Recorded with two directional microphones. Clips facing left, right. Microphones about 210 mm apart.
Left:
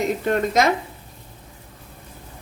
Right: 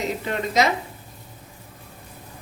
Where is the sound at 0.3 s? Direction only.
50° left (ahead or behind).